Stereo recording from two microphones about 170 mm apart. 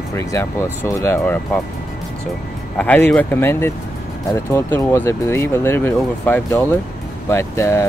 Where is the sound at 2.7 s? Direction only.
10° left (ahead or behind).